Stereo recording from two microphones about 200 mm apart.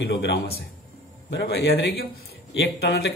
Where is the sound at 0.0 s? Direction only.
60° left (ahead or behind).